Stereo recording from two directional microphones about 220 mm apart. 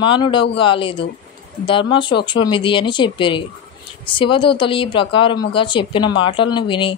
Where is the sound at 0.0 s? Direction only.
20° left (ahead or behind).